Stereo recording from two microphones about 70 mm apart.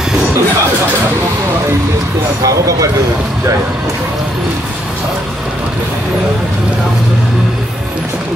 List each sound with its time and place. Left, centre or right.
2.4 s speech: right